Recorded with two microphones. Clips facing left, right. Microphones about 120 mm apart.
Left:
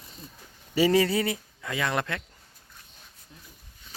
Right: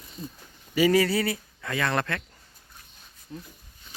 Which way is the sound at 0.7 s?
25° left (ahead or behind).